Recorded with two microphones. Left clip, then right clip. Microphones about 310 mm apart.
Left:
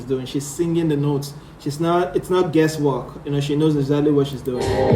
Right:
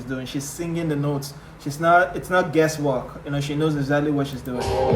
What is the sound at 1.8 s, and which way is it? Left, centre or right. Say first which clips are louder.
Speech: right 3 dB; centre.